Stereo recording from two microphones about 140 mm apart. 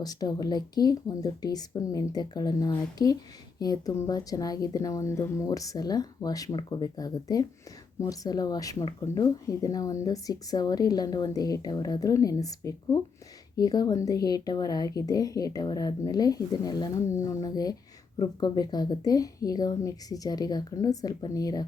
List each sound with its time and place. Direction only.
0.0 s speech: 30° left (ahead or behind)